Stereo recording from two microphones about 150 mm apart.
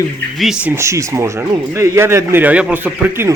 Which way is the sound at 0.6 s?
20° right (ahead or behind).